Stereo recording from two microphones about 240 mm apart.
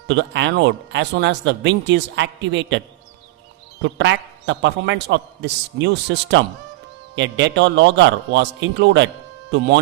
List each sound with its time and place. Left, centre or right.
0.1 s a man's voice: right